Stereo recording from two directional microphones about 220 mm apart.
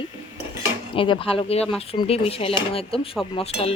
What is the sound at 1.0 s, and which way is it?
Speech, 25° left (ahead or behind).